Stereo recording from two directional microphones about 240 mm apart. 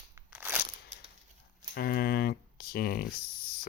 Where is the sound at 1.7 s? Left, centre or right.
Left.